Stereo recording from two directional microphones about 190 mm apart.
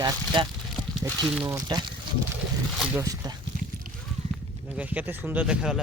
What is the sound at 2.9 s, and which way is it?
Speech, 15° right (ahead or behind).